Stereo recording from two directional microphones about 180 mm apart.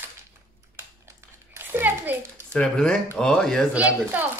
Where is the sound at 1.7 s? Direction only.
10° right (ahead or behind).